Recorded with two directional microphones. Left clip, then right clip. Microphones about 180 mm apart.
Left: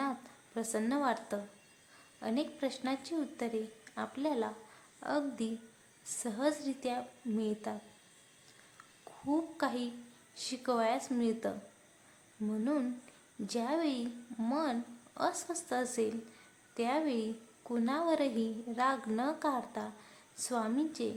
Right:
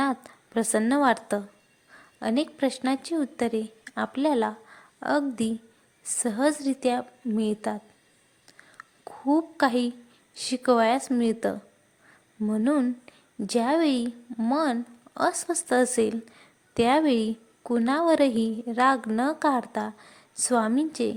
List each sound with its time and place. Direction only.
0.0 s a woman's voice: 45° right (ahead or behind)
8.8 s a sound: 45° right (ahead or behind)
10.3 s a woman's voice: 45° right (ahead or behind)